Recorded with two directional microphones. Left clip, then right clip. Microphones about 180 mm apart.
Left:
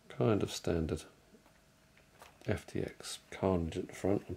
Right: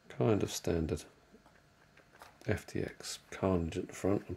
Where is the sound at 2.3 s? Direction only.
5° right (ahead or behind).